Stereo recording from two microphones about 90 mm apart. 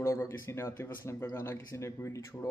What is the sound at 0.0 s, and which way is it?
A man's voice, 30° left (ahead or behind).